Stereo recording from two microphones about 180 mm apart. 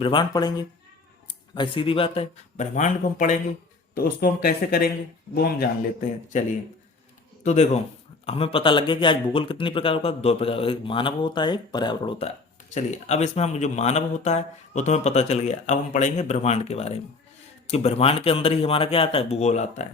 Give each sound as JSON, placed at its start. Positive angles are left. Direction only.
{"t": 0.0, "sound": "speech", "side_deg": 25}
{"t": 3.9, "sound": "a man's voice", "side_deg": 55}
{"t": 7.4, "sound": "speech", "side_deg": 40}
{"t": 12.7, "sound": "speech", "side_deg": 40}